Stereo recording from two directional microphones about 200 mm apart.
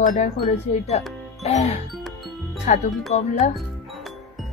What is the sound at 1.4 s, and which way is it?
Speech, 35° left (ahead or behind).